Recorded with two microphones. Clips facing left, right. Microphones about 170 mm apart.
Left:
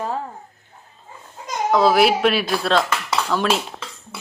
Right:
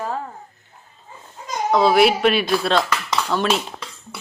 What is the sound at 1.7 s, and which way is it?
Speech, centre (ahead or behind).